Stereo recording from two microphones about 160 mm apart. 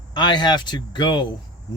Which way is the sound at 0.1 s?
25° left (ahead or behind).